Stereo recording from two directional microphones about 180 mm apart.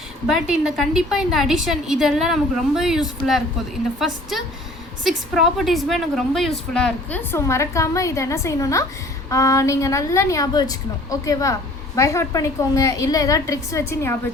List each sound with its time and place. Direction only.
0.3 s a woman's voice: 5° right (ahead or behind); by 14.2 s 15° left (ahead or behind)